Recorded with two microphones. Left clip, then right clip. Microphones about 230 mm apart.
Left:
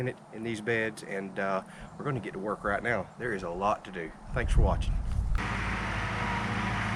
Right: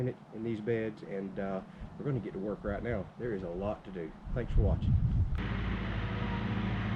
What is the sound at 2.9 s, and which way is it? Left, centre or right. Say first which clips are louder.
Speech: left 5 dB; left.